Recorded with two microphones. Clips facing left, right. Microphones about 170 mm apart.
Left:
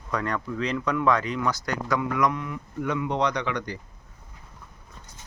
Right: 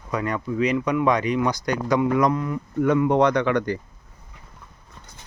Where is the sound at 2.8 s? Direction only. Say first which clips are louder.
Right 8 dB; 50° right (ahead or behind).